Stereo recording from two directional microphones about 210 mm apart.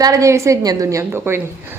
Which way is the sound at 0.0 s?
15° right (ahead or behind).